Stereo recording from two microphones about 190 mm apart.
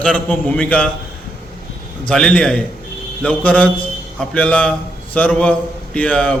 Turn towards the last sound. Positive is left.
turn(degrees=5)  # may be behind; listen again after turning